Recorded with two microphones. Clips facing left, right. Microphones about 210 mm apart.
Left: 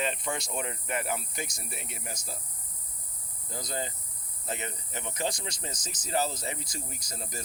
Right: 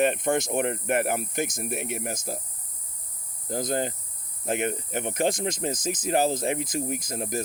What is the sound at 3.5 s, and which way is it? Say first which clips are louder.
Speech: right 9 dB; 55° right (ahead or behind).